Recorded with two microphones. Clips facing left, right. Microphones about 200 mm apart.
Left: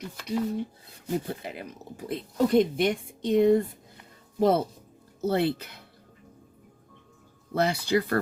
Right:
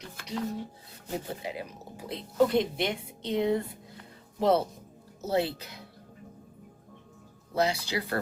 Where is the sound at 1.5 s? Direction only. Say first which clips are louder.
Right 1 dB; 55° left (ahead or behind).